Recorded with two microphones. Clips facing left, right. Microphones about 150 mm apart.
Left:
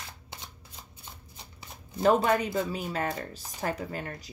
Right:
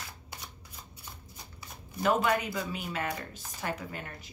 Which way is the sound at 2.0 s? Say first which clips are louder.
Left 4 dB; 35° left (ahead or behind).